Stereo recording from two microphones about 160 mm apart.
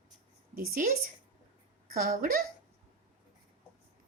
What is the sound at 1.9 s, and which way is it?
Speech, 60° right (ahead or behind).